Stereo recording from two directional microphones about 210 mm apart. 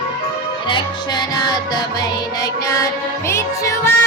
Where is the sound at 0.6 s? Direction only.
20° left (ahead or behind).